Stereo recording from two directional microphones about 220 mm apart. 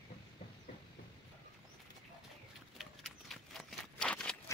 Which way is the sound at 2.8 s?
Centre (ahead or behind).